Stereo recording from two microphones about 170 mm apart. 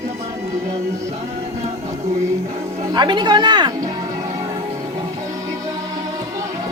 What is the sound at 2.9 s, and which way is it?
Speech, 25° right (ahead or behind).